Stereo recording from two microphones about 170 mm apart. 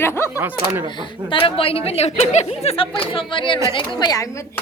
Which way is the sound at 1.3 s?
30° left (ahead or behind).